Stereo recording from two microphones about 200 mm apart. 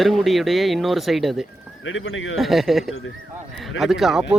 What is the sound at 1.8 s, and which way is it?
Speech, 75° left (ahead or behind).